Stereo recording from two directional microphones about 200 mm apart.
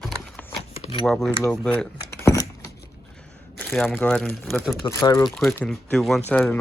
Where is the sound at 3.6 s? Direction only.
10° left (ahead or behind).